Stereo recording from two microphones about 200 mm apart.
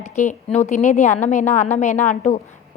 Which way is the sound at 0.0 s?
35° left (ahead or behind).